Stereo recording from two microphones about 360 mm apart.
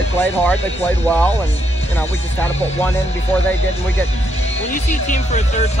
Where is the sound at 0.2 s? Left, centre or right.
Centre.